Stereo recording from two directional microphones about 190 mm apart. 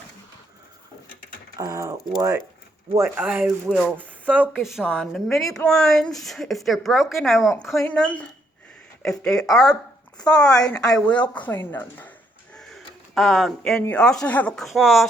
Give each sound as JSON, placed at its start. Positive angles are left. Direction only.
{"t": 1.5, "sound": "speech", "side_deg": -15}